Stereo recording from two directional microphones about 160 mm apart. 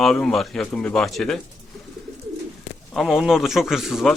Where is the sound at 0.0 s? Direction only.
Centre (ahead or behind).